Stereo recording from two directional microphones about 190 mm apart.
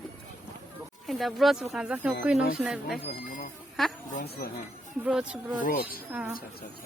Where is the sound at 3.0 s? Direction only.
50° left (ahead or behind).